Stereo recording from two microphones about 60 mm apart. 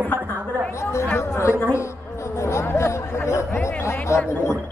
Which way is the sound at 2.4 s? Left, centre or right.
Left.